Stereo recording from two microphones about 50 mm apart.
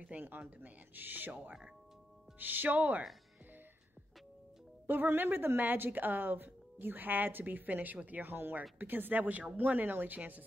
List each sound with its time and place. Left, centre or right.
0.1 s a woman's voice: right
4.8 s a woman's voice: right
8.3 s a woman's voice: right